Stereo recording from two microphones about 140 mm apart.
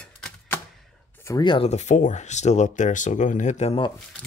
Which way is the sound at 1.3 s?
35° left (ahead or behind).